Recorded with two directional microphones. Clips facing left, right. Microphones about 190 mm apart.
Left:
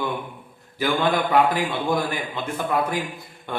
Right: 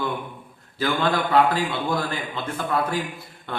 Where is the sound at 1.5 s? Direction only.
15° left (ahead or behind).